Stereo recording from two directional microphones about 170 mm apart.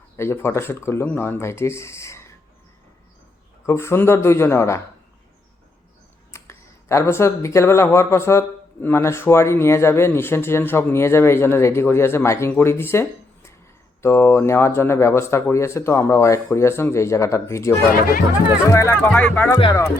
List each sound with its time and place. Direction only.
0.2 s speech: 15° left (ahead or behind)
3.7 s speech: 15° left (ahead or behind)
6.3 s speech: 15° left (ahead or behind)